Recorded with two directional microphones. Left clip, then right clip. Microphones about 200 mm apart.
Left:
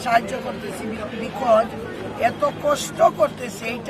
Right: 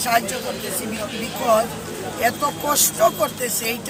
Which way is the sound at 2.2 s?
Centre (ahead or behind).